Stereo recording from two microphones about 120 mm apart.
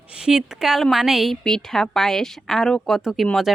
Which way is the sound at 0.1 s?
5° right (ahead or behind).